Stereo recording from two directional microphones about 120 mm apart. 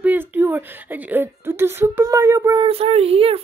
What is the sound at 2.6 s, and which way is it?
Speech, 55° right (ahead or behind).